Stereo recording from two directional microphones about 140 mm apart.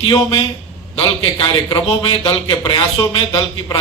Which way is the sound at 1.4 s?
30° left (ahead or behind).